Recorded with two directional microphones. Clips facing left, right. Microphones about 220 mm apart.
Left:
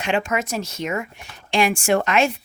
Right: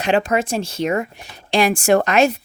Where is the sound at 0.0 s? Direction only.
35° right (ahead or behind).